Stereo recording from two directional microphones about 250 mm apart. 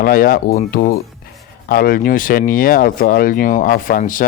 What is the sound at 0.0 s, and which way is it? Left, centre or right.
Speech, left.